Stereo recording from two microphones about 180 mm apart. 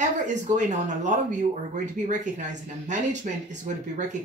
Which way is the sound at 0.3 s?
40° right (ahead or behind).